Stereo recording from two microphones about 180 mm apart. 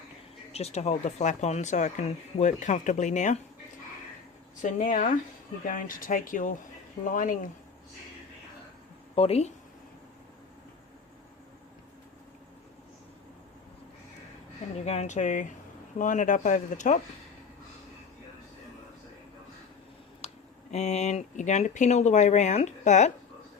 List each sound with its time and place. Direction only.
0.5 s speech: 35° left (ahead or behind)
4.6 s speech: 45° left (ahead or behind)
9.1 s speech: 35° left (ahead or behind)
14.8 s speech: 40° left (ahead or behind)
20.2 s speech: 40° left (ahead or behind)